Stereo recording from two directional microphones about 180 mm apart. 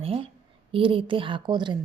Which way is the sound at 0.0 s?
30° right (ahead or behind).